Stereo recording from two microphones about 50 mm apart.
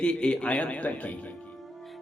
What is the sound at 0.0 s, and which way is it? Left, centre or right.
A man's voice, left.